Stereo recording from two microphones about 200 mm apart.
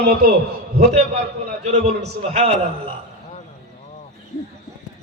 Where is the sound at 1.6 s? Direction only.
35° right (ahead or behind).